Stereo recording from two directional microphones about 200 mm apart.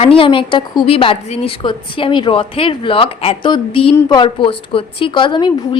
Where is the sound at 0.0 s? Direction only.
25° left (ahead or behind).